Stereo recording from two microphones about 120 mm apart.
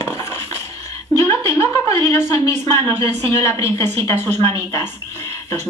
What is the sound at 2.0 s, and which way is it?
A woman's voice, 30° left (ahead or behind).